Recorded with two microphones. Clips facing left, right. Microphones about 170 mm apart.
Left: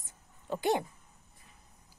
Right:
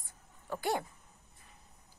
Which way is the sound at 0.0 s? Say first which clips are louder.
Even; 20° left (ahead or behind).